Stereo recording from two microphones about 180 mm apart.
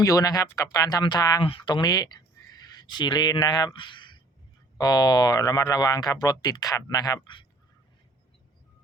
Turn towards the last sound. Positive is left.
turn(degrees=25)  # may be behind; listen again after turning